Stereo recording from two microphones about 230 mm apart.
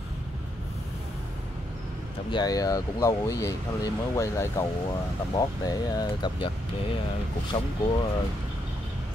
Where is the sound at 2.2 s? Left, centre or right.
Centre.